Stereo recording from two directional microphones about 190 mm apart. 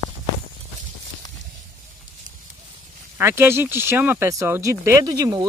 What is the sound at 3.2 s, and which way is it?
Speech, 10° right (ahead or behind).